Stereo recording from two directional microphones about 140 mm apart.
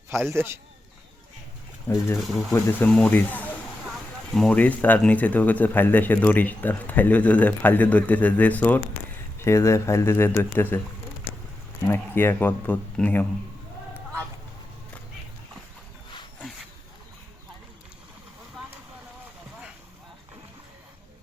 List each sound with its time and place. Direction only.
0.1 s speech: 15° right (ahead or behind)
2.1 s speech: centre (ahead or behind)
2.6 s speech: 15° left (ahead or behind)
11.9 s speech: 15° left (ahead or behind)